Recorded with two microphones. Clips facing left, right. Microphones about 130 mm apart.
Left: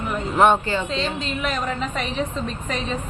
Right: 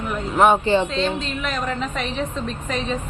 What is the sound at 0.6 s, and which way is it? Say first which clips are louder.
Speech: right 7 dB; 25° right (ahead or behind).